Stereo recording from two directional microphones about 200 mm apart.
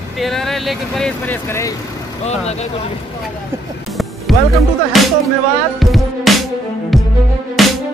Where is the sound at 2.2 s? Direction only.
35° left (ahead or behind).